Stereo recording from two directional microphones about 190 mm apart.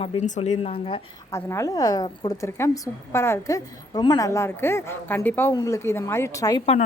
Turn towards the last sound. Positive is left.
turn(degrees=15)  # may be behind; listen again after turning